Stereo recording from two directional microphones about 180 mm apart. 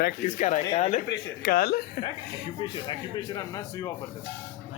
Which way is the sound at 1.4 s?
55° left (ahead or behind).